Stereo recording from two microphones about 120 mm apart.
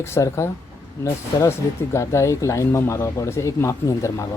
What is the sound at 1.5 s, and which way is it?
Speech, 25° left (ahead or behind).